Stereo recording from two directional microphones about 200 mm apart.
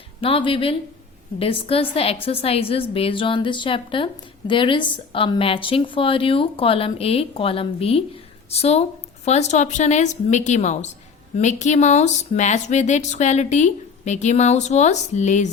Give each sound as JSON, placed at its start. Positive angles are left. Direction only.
{"t": 0.2, "sound": "a woman's voice", "side_deg": 25}